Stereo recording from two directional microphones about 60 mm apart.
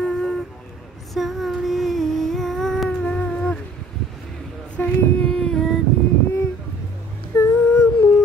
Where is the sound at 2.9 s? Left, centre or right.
Left.